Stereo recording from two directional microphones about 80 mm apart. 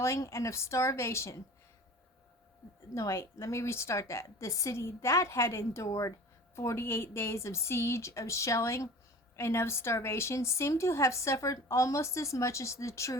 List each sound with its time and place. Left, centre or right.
0.0 s a woman's voice: left
2.9 s a woman's voice: left